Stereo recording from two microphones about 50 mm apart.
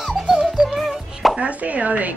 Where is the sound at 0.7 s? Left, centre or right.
Centre.